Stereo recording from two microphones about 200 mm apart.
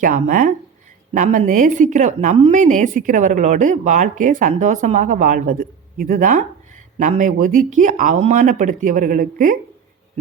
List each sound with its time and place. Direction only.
0.0 s a woman's voice: 40° right (ahead or behind)